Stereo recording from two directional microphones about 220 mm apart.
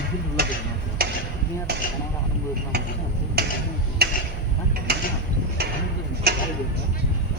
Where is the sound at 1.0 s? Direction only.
45° right (ahead or behind).